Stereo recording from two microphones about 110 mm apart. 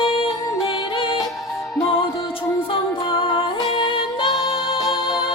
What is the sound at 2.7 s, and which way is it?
Music, 50° left (ahead or behind).